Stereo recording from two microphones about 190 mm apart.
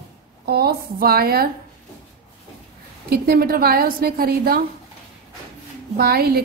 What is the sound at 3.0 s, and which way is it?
A woman's voice, 55° right (ahead or behind).